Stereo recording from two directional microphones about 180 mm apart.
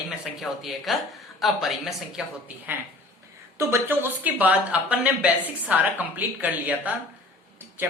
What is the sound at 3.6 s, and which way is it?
Speech, 15° right (ahead or behind).